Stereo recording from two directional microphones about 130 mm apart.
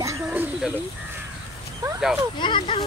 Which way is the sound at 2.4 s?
40° left (ahead or behind).